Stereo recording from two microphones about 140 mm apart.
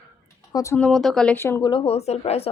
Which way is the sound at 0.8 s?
5° left (ahead or behind).